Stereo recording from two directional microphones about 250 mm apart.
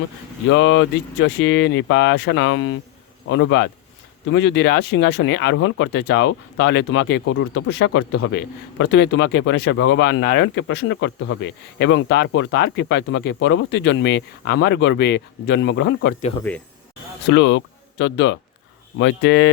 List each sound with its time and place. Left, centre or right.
0.5 s speech: left
17.2 s speech: left